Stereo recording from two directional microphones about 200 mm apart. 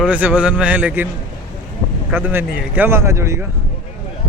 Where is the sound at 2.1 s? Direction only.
10° right (ahead or behind).